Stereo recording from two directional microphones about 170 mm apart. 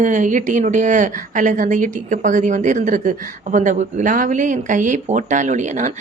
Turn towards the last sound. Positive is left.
turn(degrees=-45)  # may be behind; listen again after turning